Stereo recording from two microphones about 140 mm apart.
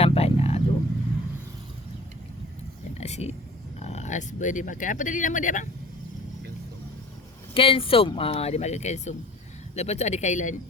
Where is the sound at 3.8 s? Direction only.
55° left (ahead or behind).